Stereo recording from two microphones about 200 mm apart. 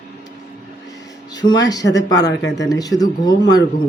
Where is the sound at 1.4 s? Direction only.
20° left (ahead or behind).